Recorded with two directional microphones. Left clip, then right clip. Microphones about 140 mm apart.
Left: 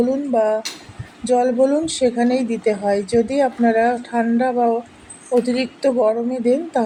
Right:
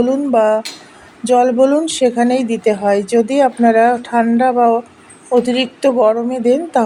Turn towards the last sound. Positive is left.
turn(degrees=-35)  # may be behind; listen again after turning